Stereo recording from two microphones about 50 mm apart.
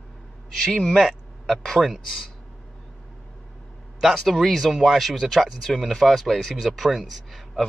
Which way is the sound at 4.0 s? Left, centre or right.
Centre.